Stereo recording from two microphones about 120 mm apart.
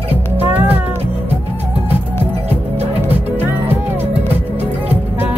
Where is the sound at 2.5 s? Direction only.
60° right (ahead or behind).